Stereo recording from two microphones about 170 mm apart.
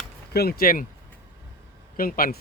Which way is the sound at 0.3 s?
65° left (ahead or behind).